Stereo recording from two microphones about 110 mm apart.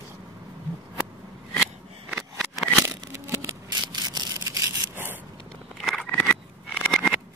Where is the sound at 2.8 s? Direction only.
25° right (ahead or behind).